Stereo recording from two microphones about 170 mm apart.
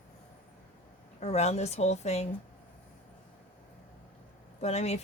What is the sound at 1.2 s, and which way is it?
Speech, 40° left (ahead or behind).